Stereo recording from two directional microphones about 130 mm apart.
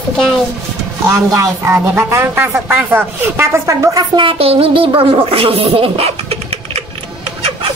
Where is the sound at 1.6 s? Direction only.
20° right (ahead or behind); by 6.8 s 50° right (ahead or behind).